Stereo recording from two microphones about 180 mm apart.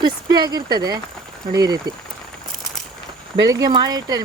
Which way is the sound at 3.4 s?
20° right (ahead or behind).